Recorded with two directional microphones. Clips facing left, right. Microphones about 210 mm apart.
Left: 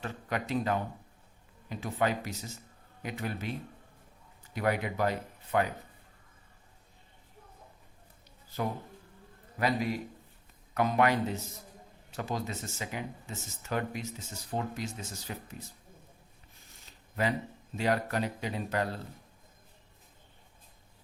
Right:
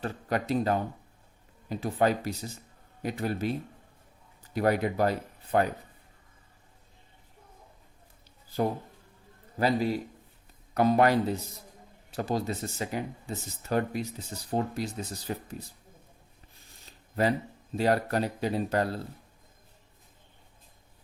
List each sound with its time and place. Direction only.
0.0 s speech: 35° right (ahead or behind)
4.5 s speech: 40° right (ahead or behind)
9.6 s speech: 30° right (ahead or behind)
17.7 s speech: 35° right (ahead or behind)